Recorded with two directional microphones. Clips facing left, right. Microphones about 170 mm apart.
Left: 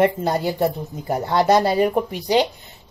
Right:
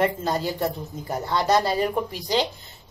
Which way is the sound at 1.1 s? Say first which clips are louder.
Left 5 dB; 60° left (ahead or behind).